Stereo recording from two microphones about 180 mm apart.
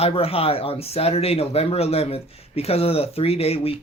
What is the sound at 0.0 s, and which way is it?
Speech, 30° left (ahead or behind).